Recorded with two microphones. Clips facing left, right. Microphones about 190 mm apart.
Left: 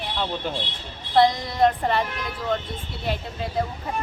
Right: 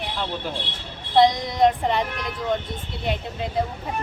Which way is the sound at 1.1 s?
20° right (ahead or behind).